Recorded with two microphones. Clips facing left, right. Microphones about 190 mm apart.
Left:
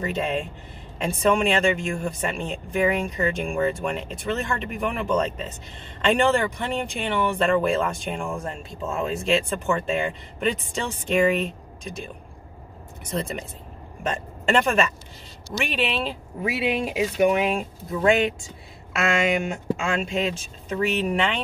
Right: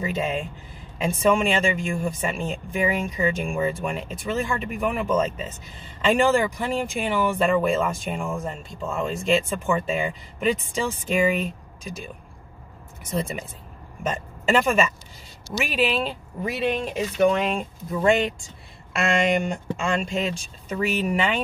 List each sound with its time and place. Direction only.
0.0 s speech: centre (ahead or behind)
13.1 s speech: 5° right (ahead or behind)